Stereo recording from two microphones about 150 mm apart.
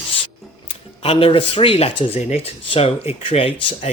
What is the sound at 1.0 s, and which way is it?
Speech, 40° left (ahead or behind).